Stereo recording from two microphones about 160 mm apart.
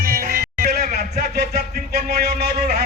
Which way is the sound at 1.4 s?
75° right (ahead or behind).